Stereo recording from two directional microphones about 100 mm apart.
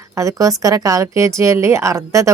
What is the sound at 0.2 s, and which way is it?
A woman's voice, 35° right (ahead or behind).